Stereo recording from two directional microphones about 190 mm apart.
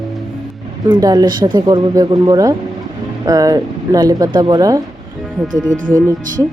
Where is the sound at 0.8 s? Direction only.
20° right (ahead or behind).